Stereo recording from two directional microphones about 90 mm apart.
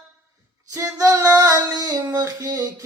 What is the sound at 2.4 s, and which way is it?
Music, 45° right (ahead or behind).